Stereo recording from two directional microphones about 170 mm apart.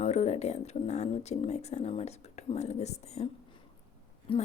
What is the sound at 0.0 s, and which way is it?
A woman's voice, 40° left (ahead or behind).